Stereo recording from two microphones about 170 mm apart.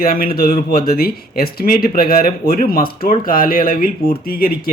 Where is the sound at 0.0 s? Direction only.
60° left (ahead or behind).